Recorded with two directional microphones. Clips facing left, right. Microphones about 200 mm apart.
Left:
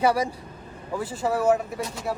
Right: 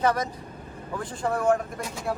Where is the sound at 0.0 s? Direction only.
10° left (ahead or behind).